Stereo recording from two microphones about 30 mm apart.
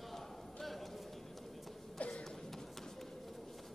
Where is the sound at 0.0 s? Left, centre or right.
Centre.